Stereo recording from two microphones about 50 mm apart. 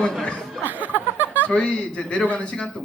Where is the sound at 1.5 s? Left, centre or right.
Centre.